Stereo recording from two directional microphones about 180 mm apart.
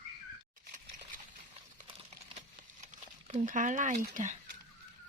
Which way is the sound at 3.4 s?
45° right (ahead or behind).